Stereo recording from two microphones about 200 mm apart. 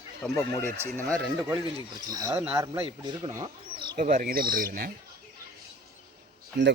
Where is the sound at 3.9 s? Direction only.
40° right (ahead or behind).